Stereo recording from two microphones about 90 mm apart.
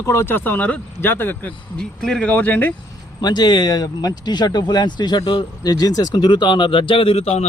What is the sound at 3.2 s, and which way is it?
Speech, 50° left (ahead or behind).